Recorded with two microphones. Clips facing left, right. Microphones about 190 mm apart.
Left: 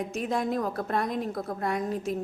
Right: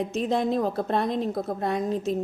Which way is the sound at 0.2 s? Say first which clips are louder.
Right 4 dB; 25° right (ahead or behind).